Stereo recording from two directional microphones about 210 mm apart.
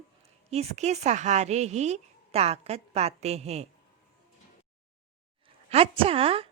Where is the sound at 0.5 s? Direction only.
30° right (ahead or behind).